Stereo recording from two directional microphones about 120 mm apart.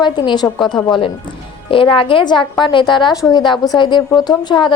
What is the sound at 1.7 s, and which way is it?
A woman's voice, 45° left (ahead or behind).